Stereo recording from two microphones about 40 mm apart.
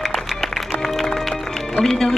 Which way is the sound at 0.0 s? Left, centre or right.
Centre.